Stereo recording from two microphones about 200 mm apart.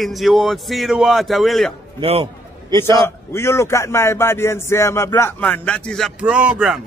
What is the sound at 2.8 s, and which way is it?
A man's voice, 10° left (ahead or behind).